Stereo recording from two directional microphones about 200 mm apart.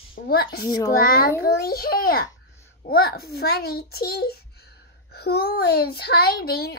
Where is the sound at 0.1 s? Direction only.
50° left (ahead or behind).